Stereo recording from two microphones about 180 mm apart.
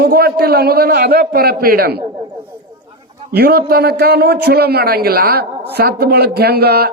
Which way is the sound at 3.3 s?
60° right (ahead or behind).